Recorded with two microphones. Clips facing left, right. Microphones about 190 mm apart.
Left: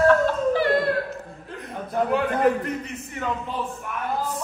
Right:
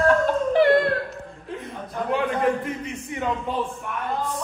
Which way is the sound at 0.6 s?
25° right (ahead or behind).